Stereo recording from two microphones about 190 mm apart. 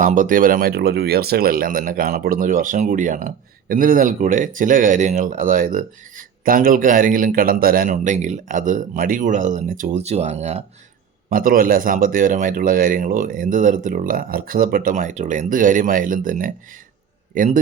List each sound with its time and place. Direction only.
0.0 s speech: 45° right (ahead or behind)
11.3 s speech: 50° right (ahead or behind)